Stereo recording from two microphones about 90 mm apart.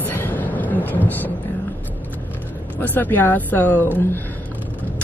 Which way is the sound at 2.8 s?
20° left (ahead or behind).